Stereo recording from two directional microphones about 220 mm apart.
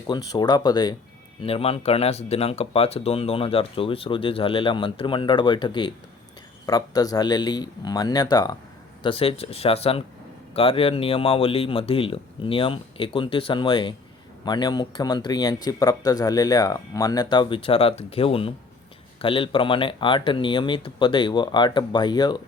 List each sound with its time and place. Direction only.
0.1 s speech: 20° left (ahead or behind)